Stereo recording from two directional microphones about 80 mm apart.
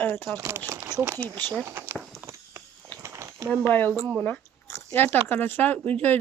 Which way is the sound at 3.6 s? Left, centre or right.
Left.